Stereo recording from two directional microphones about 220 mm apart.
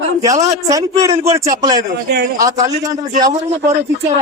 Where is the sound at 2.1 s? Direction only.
45° right (ahead or behind).